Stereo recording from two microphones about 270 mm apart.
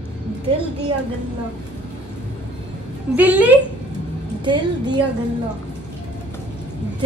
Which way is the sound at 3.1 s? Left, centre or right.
Centre.